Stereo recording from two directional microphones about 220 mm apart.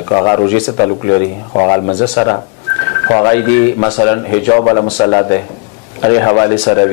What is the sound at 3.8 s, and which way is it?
Speech, 25° left (ahead or behind).